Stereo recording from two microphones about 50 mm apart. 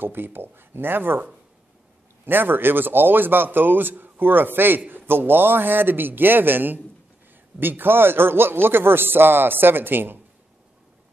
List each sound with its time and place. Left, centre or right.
0.0 s a man's voice: right
2.2 s a man's voice: right